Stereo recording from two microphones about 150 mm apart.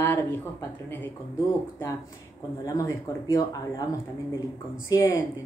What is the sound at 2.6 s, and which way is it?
A woman's voice, 20° left (ahead or behind).